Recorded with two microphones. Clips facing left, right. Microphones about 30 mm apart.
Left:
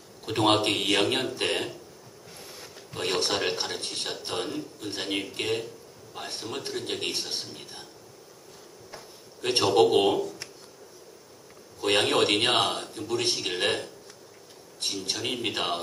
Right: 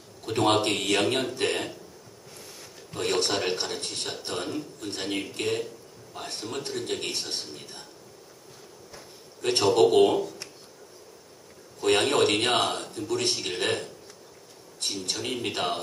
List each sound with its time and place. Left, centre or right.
0.2 s a man's voice: centre
2.3 s a sound: centre
3.2 s speech: centre
8.9 s a sound: left
9.6 s speech: centre
11.8 s speech: centre
15.0 s speech: centre